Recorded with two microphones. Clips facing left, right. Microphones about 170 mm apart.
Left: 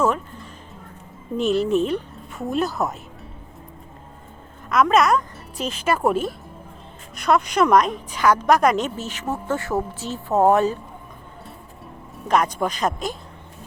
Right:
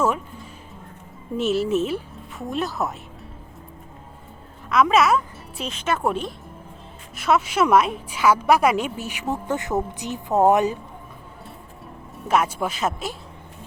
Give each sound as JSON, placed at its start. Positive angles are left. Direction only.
{"t": 0.0, "sound": "music", "side_deg": -10}
{"t": 1.4, "sound": "speech", "side_deg": -5}
{"t": 4.7, "sound": "a woman's voice", "side_deg": 0}
{"t": 12.1, "sound": "speech", "side_deg": -5}